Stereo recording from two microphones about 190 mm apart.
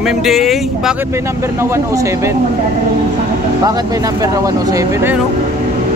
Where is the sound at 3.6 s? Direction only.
20° right (ahead or behind).